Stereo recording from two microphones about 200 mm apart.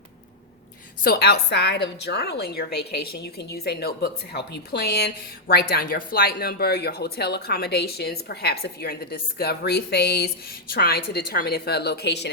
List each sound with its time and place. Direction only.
1.0 s a woman's voice: 50° left (ahead or behind)